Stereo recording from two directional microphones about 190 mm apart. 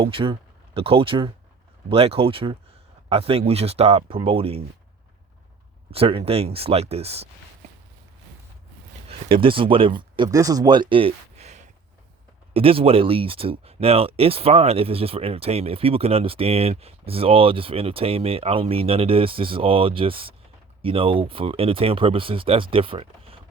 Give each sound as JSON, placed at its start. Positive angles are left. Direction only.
{"t": 0.0, "sound": "speech", "side_deg": -30}
{"t": 5.9, "sound": "speech", "side_deg": -30}
{"t": 9.0, "sound": "speech", "side_deg": -25}